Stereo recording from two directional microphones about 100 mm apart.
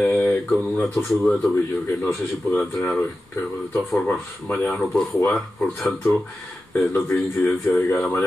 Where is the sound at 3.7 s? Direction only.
Centre (ahead or behind).